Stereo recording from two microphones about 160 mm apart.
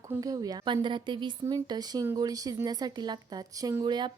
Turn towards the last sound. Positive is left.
turn(degrees=-30)  # may be behind; listen again after turning